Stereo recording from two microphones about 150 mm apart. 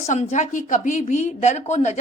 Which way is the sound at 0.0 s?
50° left (ahead or behind).